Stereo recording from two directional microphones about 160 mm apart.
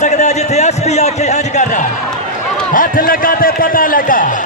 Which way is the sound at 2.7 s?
60° left (ahead or behind).